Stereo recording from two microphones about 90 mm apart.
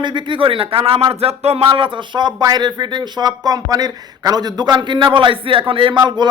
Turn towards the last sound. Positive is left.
turn(degrees=-75)  # may be behind; listen again after turning